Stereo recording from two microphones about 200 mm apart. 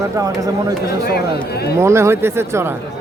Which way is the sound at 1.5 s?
55° left (ahead or behind).